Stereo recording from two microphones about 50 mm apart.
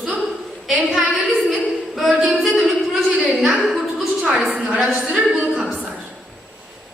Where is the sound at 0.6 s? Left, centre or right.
Centre.